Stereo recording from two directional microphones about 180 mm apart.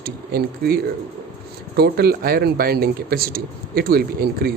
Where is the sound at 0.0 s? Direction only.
60° right (ahead or behind).